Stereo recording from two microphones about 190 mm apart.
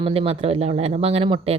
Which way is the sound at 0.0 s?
30° right (ahead or behind).